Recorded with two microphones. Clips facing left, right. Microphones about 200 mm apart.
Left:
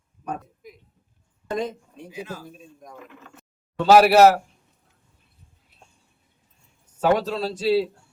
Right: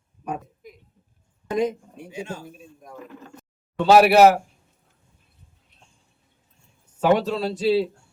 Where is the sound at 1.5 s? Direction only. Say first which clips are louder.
Right 4 dB; 10° right (ahead or behind).